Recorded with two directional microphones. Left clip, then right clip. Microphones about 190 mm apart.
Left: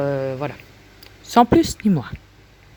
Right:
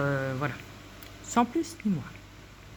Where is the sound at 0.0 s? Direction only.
30° left (ahead or behind).